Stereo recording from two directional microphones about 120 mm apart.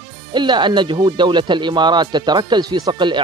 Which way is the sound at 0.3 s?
40° right (ahead or behind).